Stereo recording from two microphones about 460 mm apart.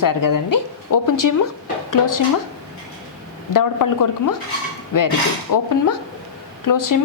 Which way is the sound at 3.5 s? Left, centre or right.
Left.